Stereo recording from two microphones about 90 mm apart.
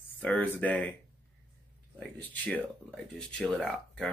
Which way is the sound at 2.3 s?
15° left (ahead or behind).